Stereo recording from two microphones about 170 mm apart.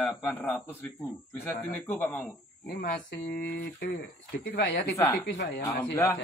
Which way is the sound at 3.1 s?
90° left.